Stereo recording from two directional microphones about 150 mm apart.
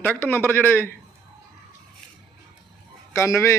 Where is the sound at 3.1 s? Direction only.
20° left (ahead or behind).